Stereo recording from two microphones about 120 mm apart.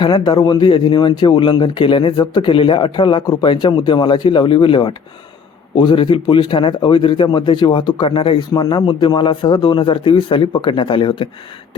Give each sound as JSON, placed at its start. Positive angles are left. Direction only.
{"t": 0.0, "sound": "speech", "side_deg": 35}